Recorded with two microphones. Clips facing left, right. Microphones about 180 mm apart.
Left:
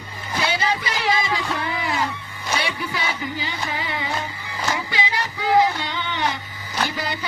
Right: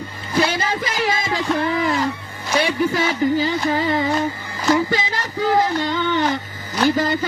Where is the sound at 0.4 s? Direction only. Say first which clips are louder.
Right 2 dB; 45° right (ahead or behind).